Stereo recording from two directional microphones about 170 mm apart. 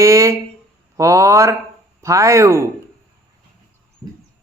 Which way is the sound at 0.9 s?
20° right (ahead or behind).